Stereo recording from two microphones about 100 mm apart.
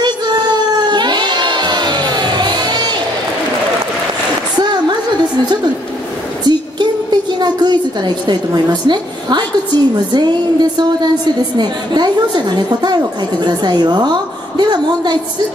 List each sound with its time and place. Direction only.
0.0 s crowd: 45° right (ahead or behind)
6.4 s a sound: 45° right (ahead or behind)
8.8 s a woman's voice: 45° right (ahead or behind)